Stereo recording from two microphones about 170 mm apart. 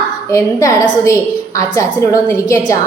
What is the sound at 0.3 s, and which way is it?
A woman's voice, 20° left (ahead or behind).